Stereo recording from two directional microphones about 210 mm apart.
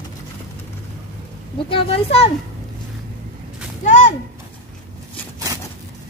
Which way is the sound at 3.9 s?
35° left (ahead or behind).